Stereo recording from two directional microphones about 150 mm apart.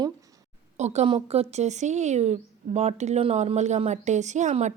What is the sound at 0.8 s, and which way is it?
A woman's voice, 50° right (ahead or behind).